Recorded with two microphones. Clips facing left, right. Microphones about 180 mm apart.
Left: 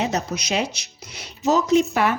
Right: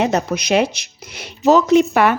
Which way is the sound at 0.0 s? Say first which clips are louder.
Right 6 dB; 60° right (ahead or behind).